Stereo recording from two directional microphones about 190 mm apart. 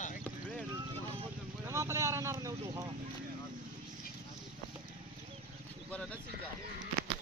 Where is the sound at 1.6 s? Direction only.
15° right (ahead or behind).